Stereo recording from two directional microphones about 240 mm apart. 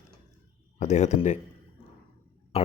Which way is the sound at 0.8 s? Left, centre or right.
Left.